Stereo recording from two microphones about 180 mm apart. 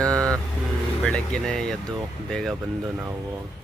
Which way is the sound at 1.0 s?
5° left (ahead or behind).